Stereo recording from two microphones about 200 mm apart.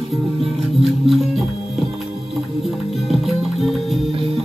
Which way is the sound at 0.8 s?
Centre (ahead or behind).